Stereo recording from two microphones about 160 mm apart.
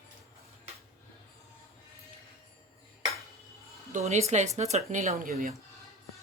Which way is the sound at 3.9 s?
45° right (ahead or behind).